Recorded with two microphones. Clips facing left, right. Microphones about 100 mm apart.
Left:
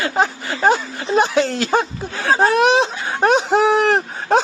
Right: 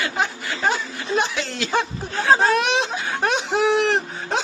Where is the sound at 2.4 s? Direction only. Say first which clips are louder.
Left 5 dB; 35° left (ahead or behind).